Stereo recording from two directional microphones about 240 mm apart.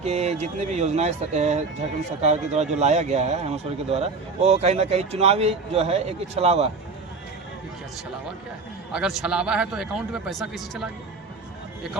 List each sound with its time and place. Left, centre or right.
0.0 s speech: right
8.9 s a man's voice: centre